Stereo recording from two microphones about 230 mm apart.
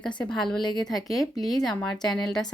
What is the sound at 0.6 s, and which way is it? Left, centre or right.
Speech, centre.